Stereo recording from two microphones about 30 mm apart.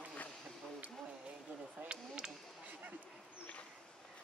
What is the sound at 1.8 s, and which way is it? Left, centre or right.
Speech, right.